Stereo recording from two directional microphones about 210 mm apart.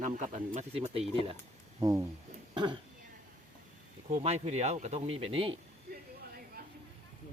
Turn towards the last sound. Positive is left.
turn(degrees=-25)  # may be behind; listen again after turning